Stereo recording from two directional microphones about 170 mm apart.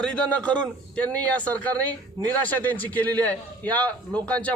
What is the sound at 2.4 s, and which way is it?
A man's voice, 10° left (ahead or behind).